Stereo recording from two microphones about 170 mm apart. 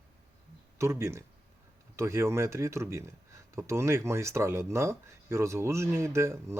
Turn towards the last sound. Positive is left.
turn(degrees=-15)  # may be behind; listen again after turning